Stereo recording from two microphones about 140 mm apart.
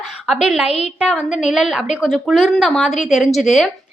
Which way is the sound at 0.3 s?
5° right (ahead or behind).